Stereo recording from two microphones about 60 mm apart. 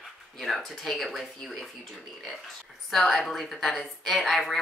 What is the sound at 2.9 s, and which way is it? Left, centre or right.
Speech, centre.